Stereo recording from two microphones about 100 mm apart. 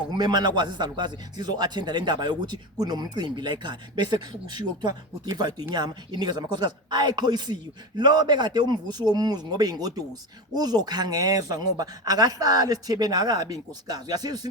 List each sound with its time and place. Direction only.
0.1 s a man's voice: 45° right (ahead or behind)